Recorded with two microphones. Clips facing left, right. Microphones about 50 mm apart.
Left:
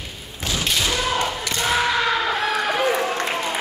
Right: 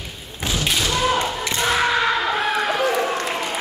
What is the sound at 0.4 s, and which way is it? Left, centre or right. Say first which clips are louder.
Thump: right 2 dB; right.